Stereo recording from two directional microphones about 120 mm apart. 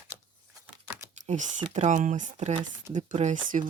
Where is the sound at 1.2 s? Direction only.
90° right.